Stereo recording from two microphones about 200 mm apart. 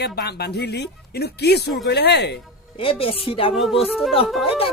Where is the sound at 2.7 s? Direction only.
25° left (ahead or behind).